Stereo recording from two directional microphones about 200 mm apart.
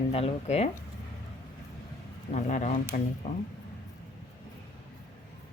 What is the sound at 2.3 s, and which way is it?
Speech, 40° left (ahead or behind).